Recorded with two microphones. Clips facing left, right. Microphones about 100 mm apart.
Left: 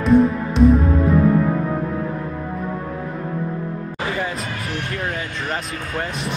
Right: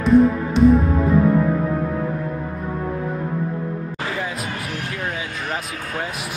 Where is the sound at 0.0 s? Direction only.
Centre (ahead or behind).